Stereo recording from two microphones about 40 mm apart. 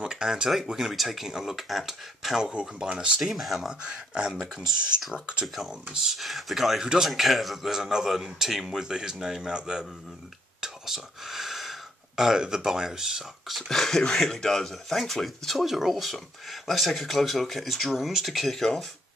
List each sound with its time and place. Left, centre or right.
0.1 s speech: centre
2.6 s speech: centre
3.3 s speech: centre
3.8 s speech: right
5.7 s speech: centre
6.8 s speech: centre
7.1 s speech: centre; by 9.8 s right
10.6 s whispering: centre
12.4 s speech: centre
13.5 s speech: centre